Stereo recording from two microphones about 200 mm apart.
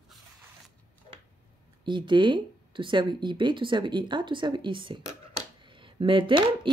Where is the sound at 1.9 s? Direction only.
25° right (ahead or behind).